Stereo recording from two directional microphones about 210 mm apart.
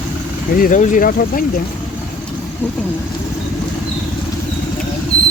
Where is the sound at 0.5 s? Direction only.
40° left (ahead or behind).